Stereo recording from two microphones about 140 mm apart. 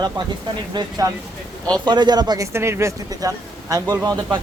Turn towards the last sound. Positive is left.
turn(degrees=-25)  # may be behind; listen again after turning